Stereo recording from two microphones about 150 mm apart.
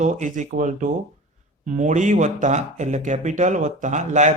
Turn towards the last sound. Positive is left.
turn(degrees=-55)  # may be behind; listen again after turning